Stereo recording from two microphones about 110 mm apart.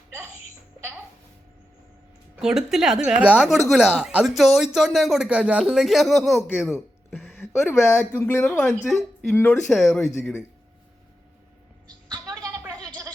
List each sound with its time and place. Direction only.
2.3 s speech: 5° right (ahead or behind)
3.4 s speech: centre (ahead or behind)
5.8 s speech: centre (ahead or behind)
7.3 s speech: 20° left (ahead or behind)
8.9 s a woman's voice: centre (ahead or behind)
9.3 s speech: 15° left (ahead or behind)
9.6 s speech: centre (ahead or behind)
12.1 s a sound: 30° right (ahead or behind)
12.7 s a sound: 10° left (ahead or behind)